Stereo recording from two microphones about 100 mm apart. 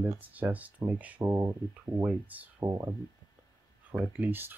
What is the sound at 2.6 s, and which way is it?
Speech, 35° right (ahead or behind).